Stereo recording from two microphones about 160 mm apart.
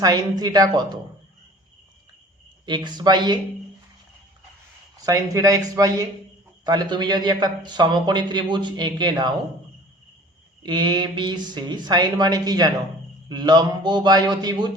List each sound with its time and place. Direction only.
0.0 s a man's voice: 25° right (ahead or behind)
2.6 s a man's voice: 30° right (ahead or behind)
5.0 s a man's voice: 20° right (ahead or behind)
10.6 s a man's voice: 25° right (ahead or behind)